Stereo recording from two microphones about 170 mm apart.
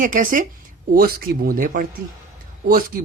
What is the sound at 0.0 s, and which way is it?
Speech, 50° right (ahead or behind).